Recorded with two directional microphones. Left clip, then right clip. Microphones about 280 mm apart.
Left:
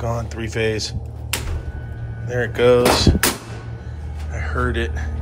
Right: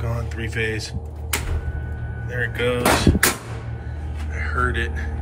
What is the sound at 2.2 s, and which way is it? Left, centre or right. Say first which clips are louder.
Speech: left 7 dB; centre.